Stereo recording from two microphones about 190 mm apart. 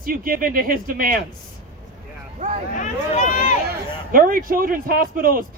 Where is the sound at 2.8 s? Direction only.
40° left (ahead or behind).